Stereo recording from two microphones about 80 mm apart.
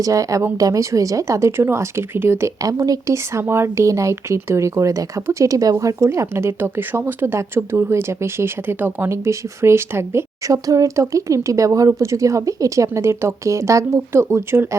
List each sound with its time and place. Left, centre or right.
0.0 s speech: right
2.6 s speech: right
3.4 s speech: right
9.1 s speech: right